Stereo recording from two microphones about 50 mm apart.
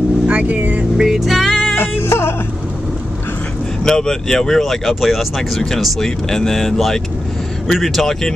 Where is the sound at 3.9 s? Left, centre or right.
Centre.